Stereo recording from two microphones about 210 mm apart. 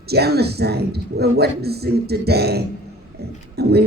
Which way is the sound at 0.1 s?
50° right (ahead or behind).